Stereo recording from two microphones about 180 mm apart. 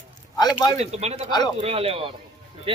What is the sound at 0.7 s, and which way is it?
Speech, 35° right (ahead or behind).